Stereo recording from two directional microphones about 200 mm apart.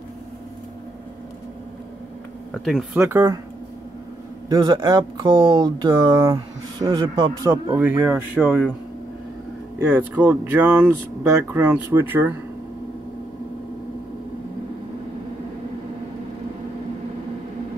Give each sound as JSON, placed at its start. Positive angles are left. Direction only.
{"t": 2.5, "sound": "speech", "side_deg": 0}
{"t": 3.0, "sound": "speech", "side_deg": -10}
{"t": 4.5, "sound": "speech", "side_deg": -20}
{"t": 9.8, "sound": "speech", "side_deg": -10}